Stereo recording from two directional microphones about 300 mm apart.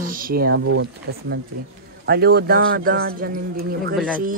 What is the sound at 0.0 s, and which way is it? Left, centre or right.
Speech, right.